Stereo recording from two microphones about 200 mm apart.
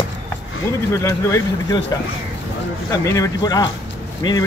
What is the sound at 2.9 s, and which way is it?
Speech, 15° left (ahead or behind).